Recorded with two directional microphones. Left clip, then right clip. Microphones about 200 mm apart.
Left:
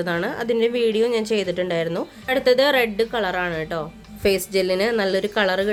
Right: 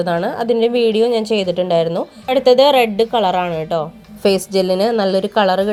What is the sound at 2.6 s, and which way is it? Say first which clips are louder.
A woman's voice: right 6 dB; 10° right (ahead or behind).